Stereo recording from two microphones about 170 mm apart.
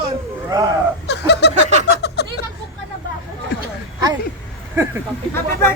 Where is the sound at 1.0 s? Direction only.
90° left.